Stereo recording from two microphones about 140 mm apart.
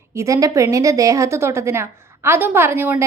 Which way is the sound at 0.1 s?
20° right (ahead or behind).